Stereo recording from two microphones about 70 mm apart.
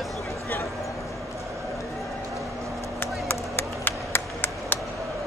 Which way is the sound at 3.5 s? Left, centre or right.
Left.